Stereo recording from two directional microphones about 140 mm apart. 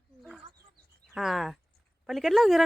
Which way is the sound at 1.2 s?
Centre (ahead or behind).